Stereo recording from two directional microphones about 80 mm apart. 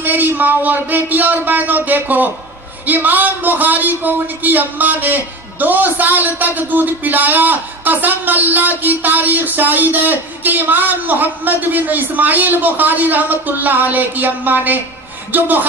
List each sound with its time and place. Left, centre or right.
0.0 s a man's voice: right